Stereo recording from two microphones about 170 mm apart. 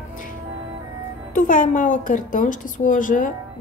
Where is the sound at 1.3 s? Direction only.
50° left (ahead or behind).